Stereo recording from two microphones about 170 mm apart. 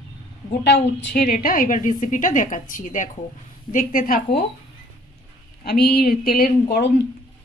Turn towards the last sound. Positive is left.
turn(degrees=65)  # may be behind; listen again after turning